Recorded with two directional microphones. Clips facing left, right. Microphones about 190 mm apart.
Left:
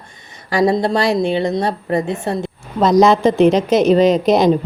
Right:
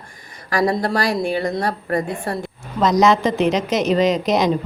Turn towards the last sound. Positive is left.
turn(degrees=30)  # may be behind; listen again after turning